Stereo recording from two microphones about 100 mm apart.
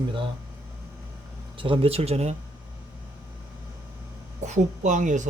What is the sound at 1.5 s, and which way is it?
Speech, 60° right (ahead or behind).